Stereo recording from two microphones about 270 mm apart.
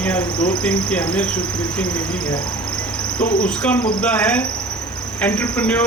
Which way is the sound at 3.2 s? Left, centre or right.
Left.